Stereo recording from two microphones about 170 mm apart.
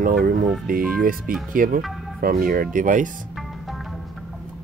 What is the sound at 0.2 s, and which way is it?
Speech, 60° right (ahead or behind).